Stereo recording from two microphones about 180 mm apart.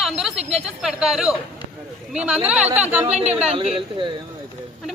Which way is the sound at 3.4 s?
35° right (ahead or behind).